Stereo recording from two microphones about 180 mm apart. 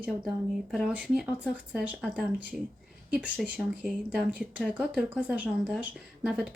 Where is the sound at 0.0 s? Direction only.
5° right (ahead or behind).